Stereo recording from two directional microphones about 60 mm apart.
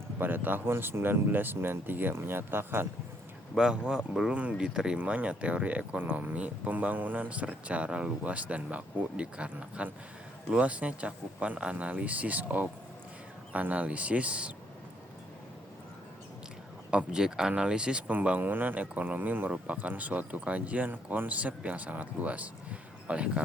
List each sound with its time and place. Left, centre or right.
0.2 s speech: right
3.5 s a man's voice: centre
4.3 s speech: right
4.5 s a man's voice: centre
16.9 s a man's voice: centre
18.1 s speech: right